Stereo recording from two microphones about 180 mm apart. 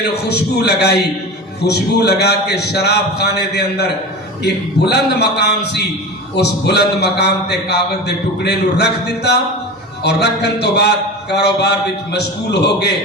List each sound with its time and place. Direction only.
0.1 s a man's voice: 65° left (ahead or behind)